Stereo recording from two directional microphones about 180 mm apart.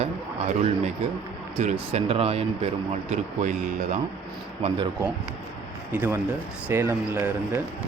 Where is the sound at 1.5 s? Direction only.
35° right (ahead or behind).